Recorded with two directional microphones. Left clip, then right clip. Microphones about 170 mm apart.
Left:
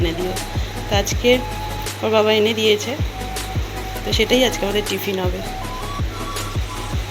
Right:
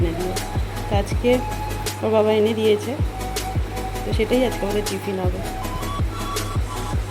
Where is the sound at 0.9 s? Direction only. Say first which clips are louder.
Left 3 dB; 10° right (ahead or behind).